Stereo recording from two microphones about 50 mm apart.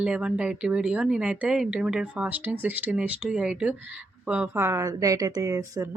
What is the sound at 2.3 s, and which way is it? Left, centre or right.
Speech, right.